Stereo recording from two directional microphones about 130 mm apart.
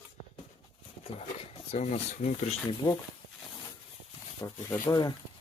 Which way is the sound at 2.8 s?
40° left (ahead or behind).